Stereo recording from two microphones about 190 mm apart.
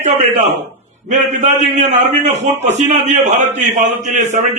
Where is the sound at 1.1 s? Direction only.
40° right (ahead or behind).